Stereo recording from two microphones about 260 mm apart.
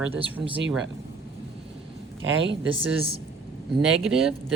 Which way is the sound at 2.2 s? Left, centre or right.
Right.